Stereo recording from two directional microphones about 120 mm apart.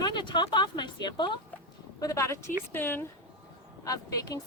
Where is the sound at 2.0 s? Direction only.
25° left (ahead or behind).